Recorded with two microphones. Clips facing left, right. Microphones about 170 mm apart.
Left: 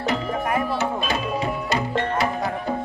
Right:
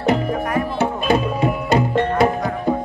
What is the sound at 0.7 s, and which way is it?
Music, 55° right (ahead or behind).